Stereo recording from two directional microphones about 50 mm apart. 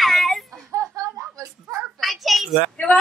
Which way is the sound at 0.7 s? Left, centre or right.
Right.